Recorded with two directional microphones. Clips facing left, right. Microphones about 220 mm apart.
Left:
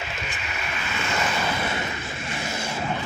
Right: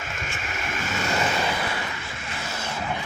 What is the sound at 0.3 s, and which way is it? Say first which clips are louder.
Vehicle: right 2 dB; 50° right (ahead or behind).